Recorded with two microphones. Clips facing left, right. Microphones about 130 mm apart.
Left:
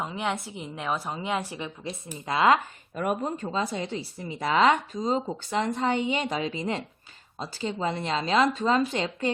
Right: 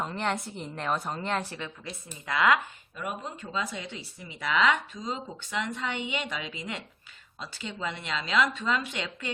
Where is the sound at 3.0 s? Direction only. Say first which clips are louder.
Left 8 dB; 50° left (ahead or behind).